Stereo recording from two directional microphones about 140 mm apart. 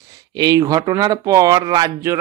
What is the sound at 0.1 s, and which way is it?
Speech, 30° right (ahead or behind).